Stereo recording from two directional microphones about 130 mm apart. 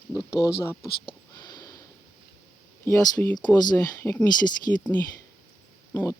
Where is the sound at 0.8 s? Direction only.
35° left (ahead or behind).